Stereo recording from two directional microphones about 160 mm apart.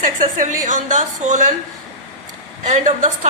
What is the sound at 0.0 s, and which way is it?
A woman's voice, 55° right (ahead or behind).